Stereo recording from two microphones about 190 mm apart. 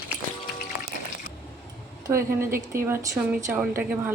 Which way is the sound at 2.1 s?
15° right (ahead or behind).